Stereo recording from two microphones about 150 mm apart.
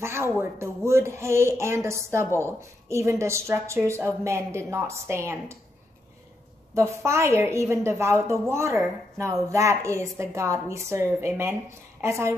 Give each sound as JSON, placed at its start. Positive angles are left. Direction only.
{"t": 0.0, "sound": "a sound", "side_deg": -15}
{"t": 0.4, "sound": "speech", "side_deg": -20}
{"t": 6.7, "sound": "a woman's voice", "side_deg": -20}